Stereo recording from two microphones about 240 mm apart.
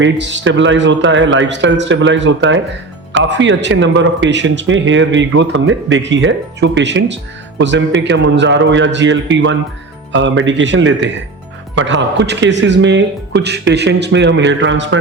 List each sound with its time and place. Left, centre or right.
0.0 s speech: right